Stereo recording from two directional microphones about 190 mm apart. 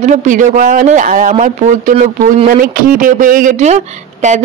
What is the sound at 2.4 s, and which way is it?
Speech, 45° right (ahead or behind).